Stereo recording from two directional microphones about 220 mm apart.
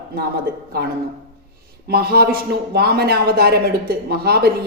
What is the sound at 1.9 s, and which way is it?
A man's voice, 45° right (ahead or behind).